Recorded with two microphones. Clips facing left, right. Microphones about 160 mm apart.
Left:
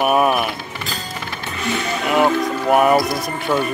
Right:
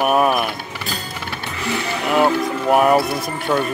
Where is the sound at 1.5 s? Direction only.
20° left (ahead or behind).